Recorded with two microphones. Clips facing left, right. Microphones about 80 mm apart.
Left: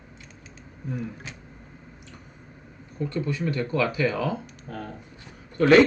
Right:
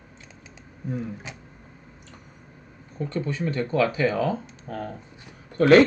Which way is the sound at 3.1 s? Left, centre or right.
Right.